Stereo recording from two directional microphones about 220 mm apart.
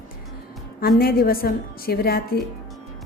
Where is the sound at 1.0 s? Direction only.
45° left (ahead or behind).